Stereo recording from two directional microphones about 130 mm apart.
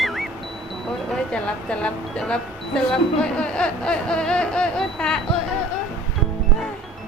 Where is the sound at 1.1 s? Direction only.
5° left (ahead or behind).